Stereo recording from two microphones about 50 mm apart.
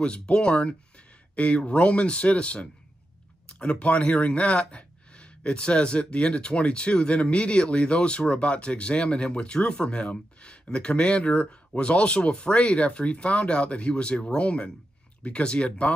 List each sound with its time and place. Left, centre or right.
0.0 s speech: left